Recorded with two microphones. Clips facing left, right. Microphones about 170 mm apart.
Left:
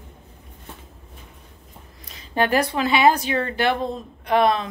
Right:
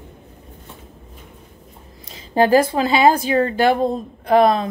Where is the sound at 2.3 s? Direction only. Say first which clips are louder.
Right 6 dB; 30° right (ahead or behind).